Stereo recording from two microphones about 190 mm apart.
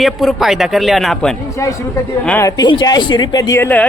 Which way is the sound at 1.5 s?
15° left (ahead or behind).